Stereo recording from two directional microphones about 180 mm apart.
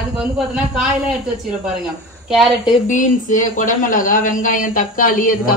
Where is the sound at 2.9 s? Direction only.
45° left (ahead or behind).